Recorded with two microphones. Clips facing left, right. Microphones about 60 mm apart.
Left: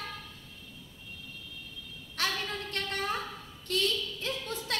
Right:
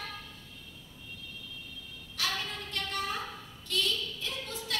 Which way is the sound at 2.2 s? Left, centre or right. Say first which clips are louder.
Left 2 dB; left.